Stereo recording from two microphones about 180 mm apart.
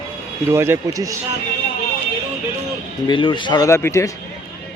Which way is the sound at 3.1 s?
25° left (ahead or behind).